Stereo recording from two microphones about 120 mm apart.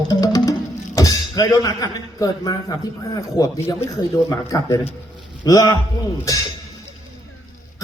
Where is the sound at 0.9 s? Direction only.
25° left (ahead or behind).